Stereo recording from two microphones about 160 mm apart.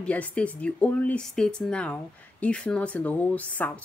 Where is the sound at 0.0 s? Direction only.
10° left (ahead or behind).